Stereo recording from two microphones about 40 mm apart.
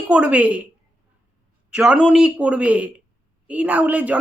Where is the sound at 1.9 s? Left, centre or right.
Right.